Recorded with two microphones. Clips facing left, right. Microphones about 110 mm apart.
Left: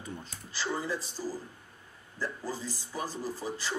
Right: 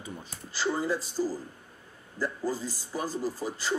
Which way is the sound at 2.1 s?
40° right (ahead or behind).